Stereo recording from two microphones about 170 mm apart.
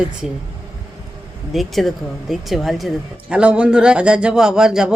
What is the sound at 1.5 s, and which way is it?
Speech, centre (ahead or behind).